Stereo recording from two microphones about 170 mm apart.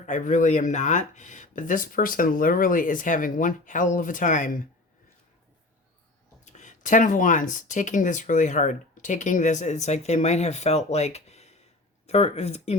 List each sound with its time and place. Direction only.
0.0 s speech: 50° left (ahead or behind)
6.4 s speech: 45° left (ahead or behind)